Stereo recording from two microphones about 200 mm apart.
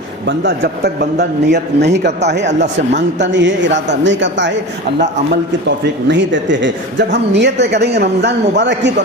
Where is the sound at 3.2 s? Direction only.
65° right (ahead or behind).